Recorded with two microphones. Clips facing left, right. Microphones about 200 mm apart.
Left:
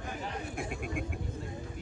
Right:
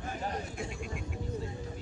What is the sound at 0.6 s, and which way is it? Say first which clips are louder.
Speech: left 3 dB; 55° left (ahead or behind).